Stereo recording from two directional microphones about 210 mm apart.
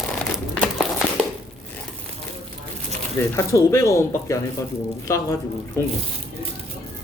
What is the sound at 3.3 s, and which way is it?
Speech, 15° left (ahead or behind).